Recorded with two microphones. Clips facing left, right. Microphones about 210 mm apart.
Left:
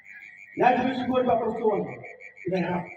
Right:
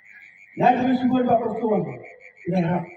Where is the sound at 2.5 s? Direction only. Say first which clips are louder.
Right 4 dB; 50° right (ahead or behind).